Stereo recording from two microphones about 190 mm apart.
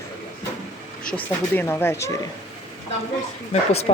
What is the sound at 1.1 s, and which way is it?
Speech, 10° left (ahead or behind).